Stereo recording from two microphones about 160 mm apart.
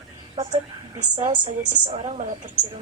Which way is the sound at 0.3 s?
40° right (ahead or behind).